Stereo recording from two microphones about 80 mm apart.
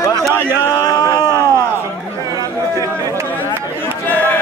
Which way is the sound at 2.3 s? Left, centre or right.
Right.